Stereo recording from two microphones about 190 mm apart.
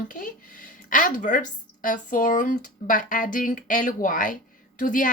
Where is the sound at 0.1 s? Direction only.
45° left (ahead or behind).